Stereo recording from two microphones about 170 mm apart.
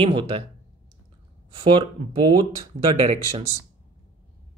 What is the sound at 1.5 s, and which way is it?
Speech, 30° right (ahead or behind).